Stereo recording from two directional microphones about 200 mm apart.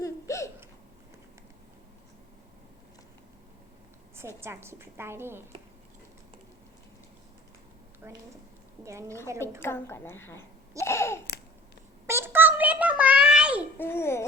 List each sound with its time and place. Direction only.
0.0 s hiccup: 15° left (ahead or behind)
4.4 s a woman's voice: 10° right (ahead or behind)
8.0 s a woman's voice: 10° right (ahead or behind)
9.6 s a woman's voice: 10° left (ahead or behind)
10.8 s babbling: 15° left (ahead or behind)
12.0 s a sound: 10° right (ahead or behind)
13.7 s babbling: 10° left (ahead or behind)